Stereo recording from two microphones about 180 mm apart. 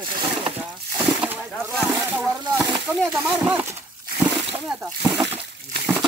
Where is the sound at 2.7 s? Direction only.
Centre (ahead or behind).